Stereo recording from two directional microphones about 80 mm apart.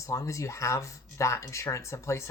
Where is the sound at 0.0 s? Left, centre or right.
Left.